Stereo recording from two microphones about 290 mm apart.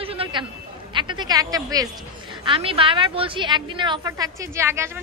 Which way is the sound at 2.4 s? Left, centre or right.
Centre.